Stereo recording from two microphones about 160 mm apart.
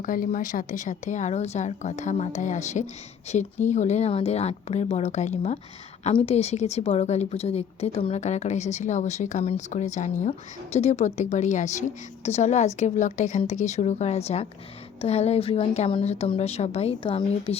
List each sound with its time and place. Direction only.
0.0 s a woman's voice: 55° left (ahead or behind); by 17.6 s 35° left (ahead or behind)